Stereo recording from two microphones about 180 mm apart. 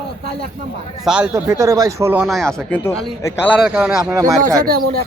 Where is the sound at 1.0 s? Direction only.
5° right (ahead or behind).